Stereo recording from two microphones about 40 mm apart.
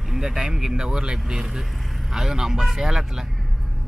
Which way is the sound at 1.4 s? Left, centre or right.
Centre.